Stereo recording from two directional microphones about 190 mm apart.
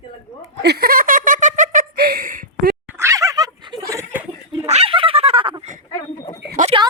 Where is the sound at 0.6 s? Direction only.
55° right (ahead or behind).